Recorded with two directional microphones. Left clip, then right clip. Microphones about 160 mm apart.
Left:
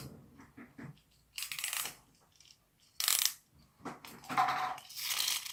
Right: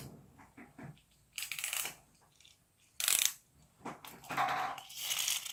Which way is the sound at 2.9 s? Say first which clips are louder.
Even; 25° right (ahead or behind).